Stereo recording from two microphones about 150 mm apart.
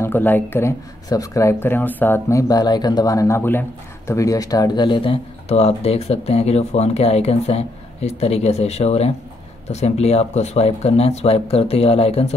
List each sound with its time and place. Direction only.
0.0 s speech: 15° left (ahead or behind); by 12.4 s 40° left (ahead or behind)